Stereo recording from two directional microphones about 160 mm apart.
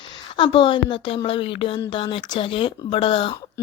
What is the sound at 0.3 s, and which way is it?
Speech, 30° left (ahead or behind).